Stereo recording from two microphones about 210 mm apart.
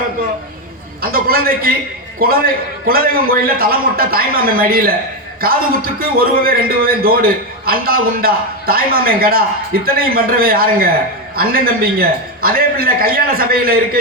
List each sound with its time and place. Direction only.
1.0 s a man's voice: 45° right (ahead or behind)